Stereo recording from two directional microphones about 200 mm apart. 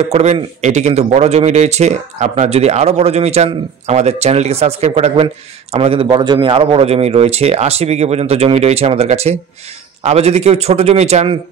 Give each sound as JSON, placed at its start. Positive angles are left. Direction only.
{"t": 0.1, "sound": "speech", "side_deg": -35}